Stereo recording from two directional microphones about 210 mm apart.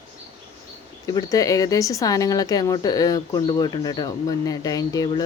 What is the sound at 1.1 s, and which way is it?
A woman's voice, 15° left (ahead or behind).